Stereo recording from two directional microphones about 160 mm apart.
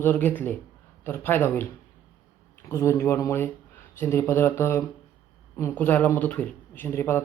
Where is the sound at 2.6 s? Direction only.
20° left (ahead or behind).